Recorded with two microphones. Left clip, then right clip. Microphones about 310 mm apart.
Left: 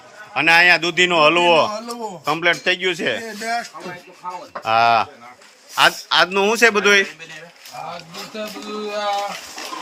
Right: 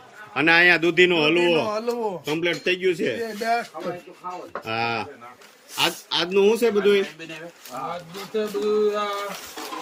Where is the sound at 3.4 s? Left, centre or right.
Centre.